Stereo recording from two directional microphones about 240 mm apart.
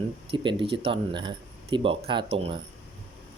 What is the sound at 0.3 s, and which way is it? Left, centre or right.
Speech, right.